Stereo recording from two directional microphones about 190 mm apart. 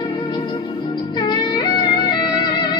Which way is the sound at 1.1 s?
20° left (ahead or behind).